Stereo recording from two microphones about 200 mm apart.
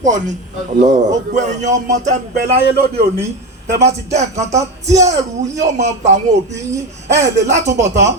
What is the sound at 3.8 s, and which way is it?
Speech, 35° right (ahead or behind).